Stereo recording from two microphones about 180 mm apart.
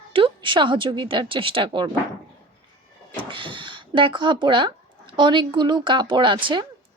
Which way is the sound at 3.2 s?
25° right (ahead or behind).